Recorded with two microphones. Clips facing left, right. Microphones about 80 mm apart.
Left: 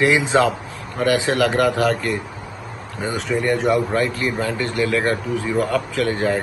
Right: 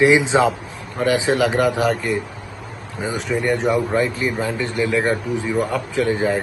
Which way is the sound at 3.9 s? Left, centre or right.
Centre.